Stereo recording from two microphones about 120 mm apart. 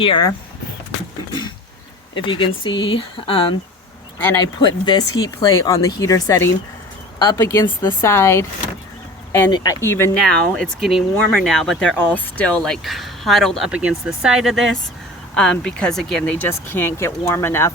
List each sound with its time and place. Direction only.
0.0 s speech: 45° left (ahead or behind)
1.3 s a sound: 40° left (ahead or behind)
2.1 s speech: 40° left (ahead or behind)
4.2 s speech: 25° left (ahead or behind)
9.8 s speech: 20° left (ahead or behind)
10.2 s speech: 5° left (ahead or behind)
13.7 s speech: 10° right (ahead or behind); by 17.7 s 20° left (ahead or behind)